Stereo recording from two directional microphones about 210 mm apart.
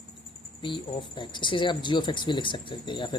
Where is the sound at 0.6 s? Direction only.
25° left (ahead or behind).